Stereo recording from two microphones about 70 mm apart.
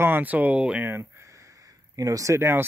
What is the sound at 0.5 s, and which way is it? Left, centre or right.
Speech, centre.